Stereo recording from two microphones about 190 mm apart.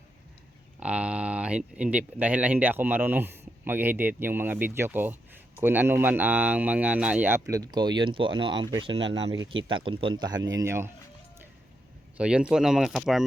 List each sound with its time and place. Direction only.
0.8 s speech: 5° right (ahead or behind)
7.5 s speech: 20° right (ahead or behind)
12.1 s speech: 5° right (ahead or behind)